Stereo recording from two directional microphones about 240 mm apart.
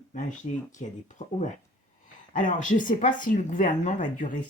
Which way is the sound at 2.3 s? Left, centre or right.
Left.